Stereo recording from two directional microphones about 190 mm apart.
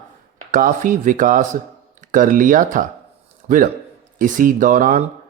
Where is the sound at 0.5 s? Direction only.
45° right (ahead or behind).